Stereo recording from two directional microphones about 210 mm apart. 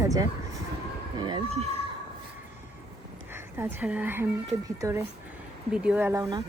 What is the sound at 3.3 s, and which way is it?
A woman's voice, 10° right (ahead or behind).